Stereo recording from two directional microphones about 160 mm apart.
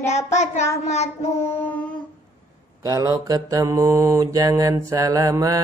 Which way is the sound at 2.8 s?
20° right (ahead or behind).